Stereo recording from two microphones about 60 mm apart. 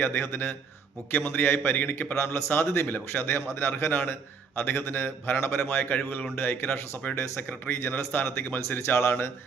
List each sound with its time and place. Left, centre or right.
0.0 s speech: left
2.2 s a man's voice: left
6.2 s speech: centre
7.3 s speech: left